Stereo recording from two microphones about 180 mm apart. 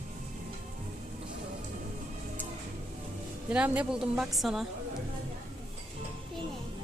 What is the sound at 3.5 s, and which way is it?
Speech, 5° right (ahead or behind).